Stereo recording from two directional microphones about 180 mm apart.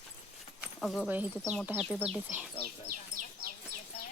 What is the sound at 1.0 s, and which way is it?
Speech, 10° right (ahead or behind).